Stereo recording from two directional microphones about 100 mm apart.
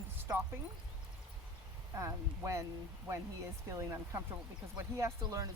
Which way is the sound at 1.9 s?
30° right (ahead or behind).